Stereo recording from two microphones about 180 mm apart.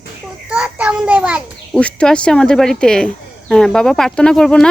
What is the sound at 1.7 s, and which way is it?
Speech, 5° left (ahead or behind).